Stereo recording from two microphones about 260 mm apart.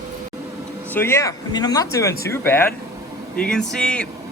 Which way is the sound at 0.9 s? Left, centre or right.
Centre.